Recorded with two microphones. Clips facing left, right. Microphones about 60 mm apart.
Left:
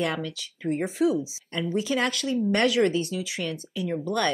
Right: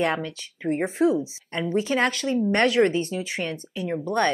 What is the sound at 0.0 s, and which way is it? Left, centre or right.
Speech, right.